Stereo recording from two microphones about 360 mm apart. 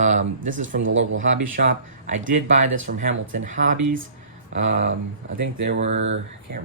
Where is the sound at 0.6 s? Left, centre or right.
Right.